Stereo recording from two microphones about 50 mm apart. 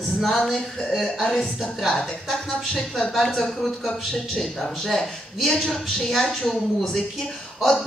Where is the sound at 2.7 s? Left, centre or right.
Centre.